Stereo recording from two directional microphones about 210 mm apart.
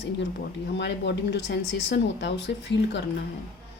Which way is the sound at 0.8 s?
55° left (ahead or behind).